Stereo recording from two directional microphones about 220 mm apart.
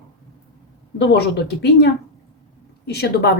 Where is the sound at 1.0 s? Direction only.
50° left (ahead or behind).